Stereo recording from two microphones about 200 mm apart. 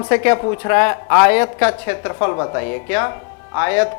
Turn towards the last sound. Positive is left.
turn(degrees=20)  # may be behind; listen again after turning